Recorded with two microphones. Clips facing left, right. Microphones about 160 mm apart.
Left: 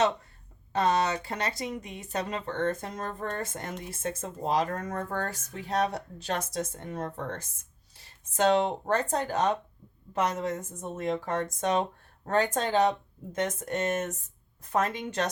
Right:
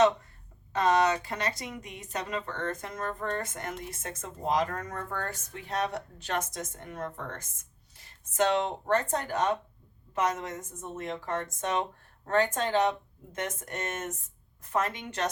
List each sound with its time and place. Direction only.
0.7 s speech: 30° left (ahead or behind)